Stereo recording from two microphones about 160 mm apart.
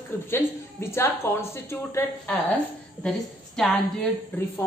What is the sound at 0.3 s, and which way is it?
A woman's voice, 15° left (ahead or behind).